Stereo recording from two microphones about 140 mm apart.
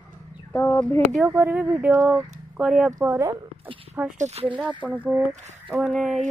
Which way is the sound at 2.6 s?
5° right (ahead or behind).